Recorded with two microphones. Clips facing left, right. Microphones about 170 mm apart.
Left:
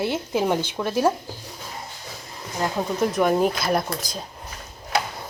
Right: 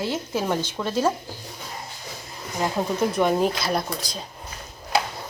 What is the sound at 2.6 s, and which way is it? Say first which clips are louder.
Speech: even; 5° right (ahead or behind).